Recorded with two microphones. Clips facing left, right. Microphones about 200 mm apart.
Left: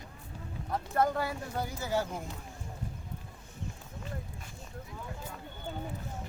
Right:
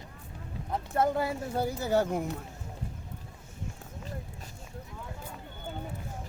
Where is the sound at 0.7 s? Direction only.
25° right (ahead or behind).